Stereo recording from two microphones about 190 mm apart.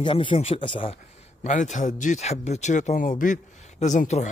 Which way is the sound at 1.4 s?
40° left (ahead or behind).